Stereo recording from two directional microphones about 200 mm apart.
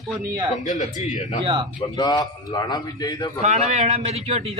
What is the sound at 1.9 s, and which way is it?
A man's voice, 20° left (ahead or behind).